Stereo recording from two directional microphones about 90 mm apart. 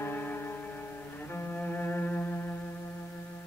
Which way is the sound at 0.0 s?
25° left (ahead or behind).